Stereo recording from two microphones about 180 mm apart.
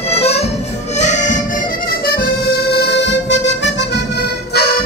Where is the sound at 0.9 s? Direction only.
40° left (ahead or behind).